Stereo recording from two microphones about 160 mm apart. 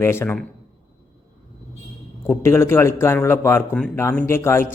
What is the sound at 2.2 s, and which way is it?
A man's voice, 15° left (ahead or behind).